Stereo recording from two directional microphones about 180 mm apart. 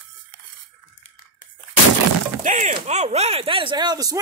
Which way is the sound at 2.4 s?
40° right (ahead or behind).